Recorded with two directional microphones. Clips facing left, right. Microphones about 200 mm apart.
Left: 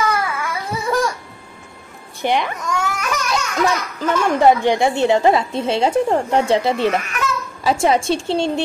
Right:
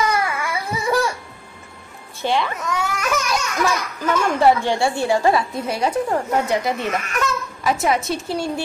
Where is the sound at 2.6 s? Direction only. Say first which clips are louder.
Left 1 dB; centre (ahead or behind).